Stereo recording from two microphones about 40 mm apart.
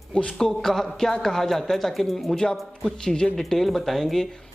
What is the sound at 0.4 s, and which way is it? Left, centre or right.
Speech, centre.